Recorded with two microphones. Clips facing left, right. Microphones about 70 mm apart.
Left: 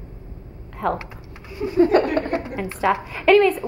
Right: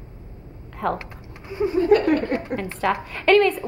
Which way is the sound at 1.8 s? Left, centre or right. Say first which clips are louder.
Left 2 dB; left.